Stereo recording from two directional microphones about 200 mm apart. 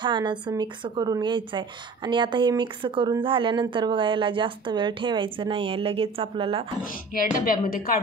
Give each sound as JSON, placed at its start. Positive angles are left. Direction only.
{"t": 0.0, "sound": "a woman's voice", "side_deg": -25}
{"t": 6.8, "sound": "a woman's voice", "side_deg": 45}